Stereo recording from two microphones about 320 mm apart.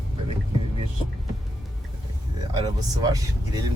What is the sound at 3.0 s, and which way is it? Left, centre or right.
Speech, centre.